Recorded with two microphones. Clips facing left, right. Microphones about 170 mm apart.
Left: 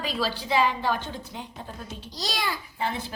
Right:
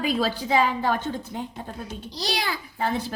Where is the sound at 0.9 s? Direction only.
50° right (ahead or behind).